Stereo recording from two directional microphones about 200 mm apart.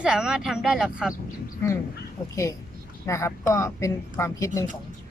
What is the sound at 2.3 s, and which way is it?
Speech, 15° left (ahead or behind).